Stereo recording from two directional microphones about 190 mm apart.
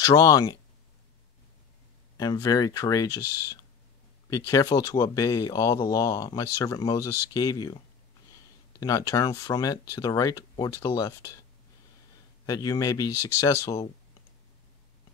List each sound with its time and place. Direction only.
0.0 s speech: 20° left (ahead or behind)
2.1 s speech: 20° left (ahead or behind)
4.3 s speech: 20° left (ahead or behind)
8.7 s speech: 20° left (ahead or behind)
12.4 s speech: 20° left (ahead or behind)